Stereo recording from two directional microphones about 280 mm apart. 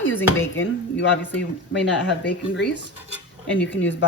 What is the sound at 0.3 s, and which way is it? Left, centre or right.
Speech, left.